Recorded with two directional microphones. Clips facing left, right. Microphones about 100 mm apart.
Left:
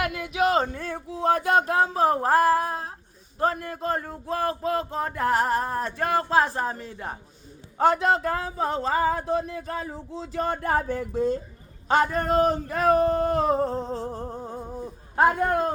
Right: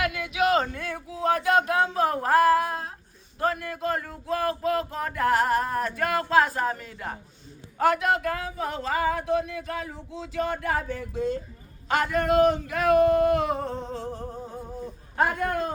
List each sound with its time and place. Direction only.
0.1 s speech: 35° left (ahead or behind)
2.0 s a sound: 30° left (ahead or behind)
3.4 s speech: 30° left (ahead or behind)
15.1 s speech: 35° left (ahead or behind)